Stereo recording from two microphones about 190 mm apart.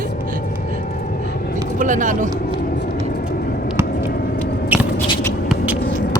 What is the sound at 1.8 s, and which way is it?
Speech, 40° right (ahead or behind).